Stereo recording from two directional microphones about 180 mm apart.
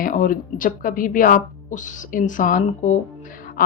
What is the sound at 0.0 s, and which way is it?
A woman's voice, 50° left (ahead or behind).